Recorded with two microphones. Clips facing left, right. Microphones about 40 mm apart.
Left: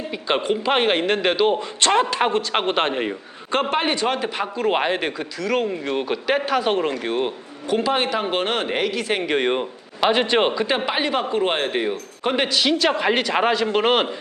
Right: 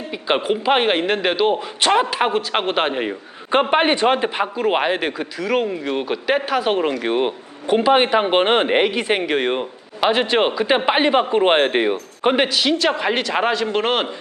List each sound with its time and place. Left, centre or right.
0.1 s speech: centre
3.5 s speech: right
4.5 s speech: centre
7.0 s speech: right
9.2 s speech: centre
10.8 s speech: right
12.5 s speech: centre